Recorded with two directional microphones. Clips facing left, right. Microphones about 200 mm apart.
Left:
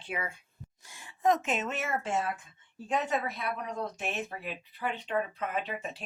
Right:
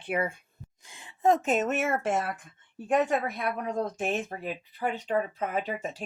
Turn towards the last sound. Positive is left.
turn(degrees=-40)  # may be behind; listen again after turning